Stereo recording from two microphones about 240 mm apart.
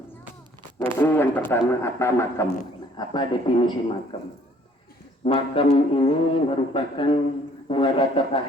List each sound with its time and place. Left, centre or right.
0.9 s speech: centre
5.2 s speech: left